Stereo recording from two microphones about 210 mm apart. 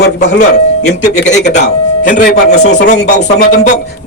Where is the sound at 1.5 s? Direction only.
35° left (ahead or behind).